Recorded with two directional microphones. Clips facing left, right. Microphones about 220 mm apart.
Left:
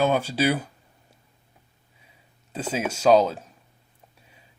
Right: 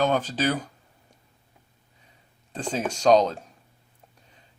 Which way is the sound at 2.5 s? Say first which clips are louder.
Left 1 dB; 5° left (ahead or behind).